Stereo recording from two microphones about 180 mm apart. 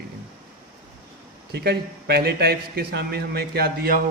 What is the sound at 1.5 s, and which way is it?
A man's voice, 60° right (ahead or behind).